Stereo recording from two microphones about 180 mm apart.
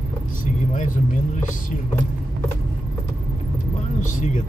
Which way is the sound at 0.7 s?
45° left (ahead or behind).